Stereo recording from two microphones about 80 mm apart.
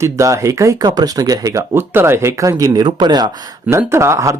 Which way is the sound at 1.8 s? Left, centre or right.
Right.